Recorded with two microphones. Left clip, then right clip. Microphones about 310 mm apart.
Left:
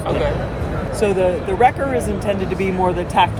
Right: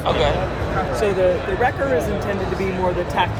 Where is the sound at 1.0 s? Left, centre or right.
Left.